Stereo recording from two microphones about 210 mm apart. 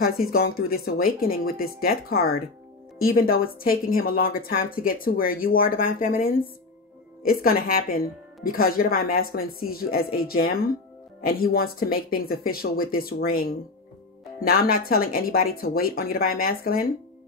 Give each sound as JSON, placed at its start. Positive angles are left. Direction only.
{"t": 0.0, "sound": "a woman's voice", "side_deg": 45}